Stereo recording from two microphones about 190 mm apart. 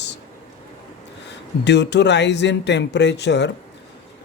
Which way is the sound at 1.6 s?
65° left (ahead or behind).